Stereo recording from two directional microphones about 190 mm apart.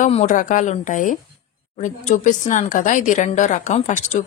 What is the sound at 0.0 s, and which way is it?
Speech, 40° left (ahead or behind).